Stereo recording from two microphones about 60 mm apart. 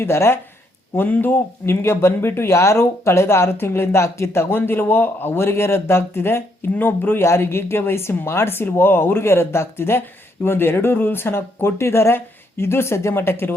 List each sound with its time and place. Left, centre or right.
0.0 s speech: left
0.9 s speech: left